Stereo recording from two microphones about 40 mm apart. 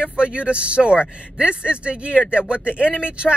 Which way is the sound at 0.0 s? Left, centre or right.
Right.